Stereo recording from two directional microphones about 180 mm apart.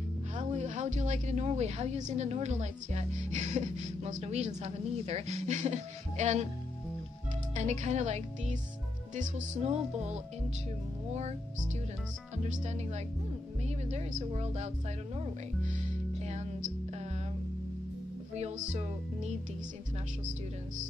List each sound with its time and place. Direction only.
0.4 s a woman's voice: 40° right (ahead or behind)
7.5 s a woman's voice: 40° right (ahead or behind)
12.4 s a woman's voice: 40° right (ahead or behind)
16.2 s music: 40° right (ahead or behind)
18.3 s a woman's voice: 40° right (ahead or behind)